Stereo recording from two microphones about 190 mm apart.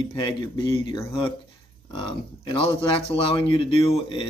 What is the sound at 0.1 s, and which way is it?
Speech, 25° left (ahead or behind).